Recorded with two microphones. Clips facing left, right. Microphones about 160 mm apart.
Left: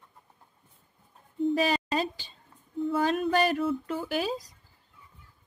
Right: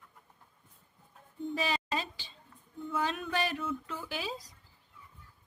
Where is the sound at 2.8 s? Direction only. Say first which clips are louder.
Left 8 dB; 40° left (ahead or behind).